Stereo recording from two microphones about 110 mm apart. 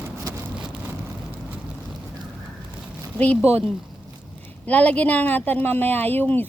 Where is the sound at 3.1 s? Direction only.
15° left (ahead or behind).